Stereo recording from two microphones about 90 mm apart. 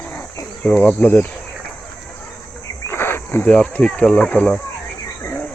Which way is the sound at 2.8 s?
25° left (ahead or behind).